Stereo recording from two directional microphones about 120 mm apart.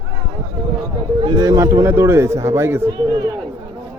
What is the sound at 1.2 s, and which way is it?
A man's voice, 35° right (ahead or behind).